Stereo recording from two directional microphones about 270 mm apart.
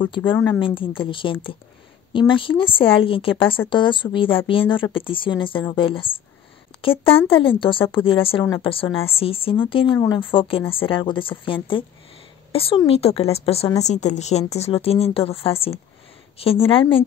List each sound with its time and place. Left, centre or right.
0.0 s speech: centre
7.2 s speech: centre